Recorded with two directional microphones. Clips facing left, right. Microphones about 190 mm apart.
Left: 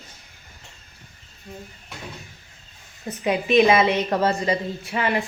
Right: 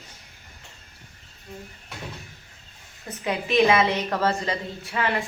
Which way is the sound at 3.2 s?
15° left (ahead or behind).